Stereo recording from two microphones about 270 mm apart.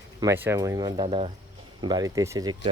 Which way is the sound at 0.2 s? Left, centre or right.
Centre.